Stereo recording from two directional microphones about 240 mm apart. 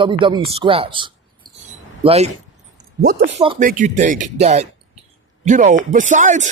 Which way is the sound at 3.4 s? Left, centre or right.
Right.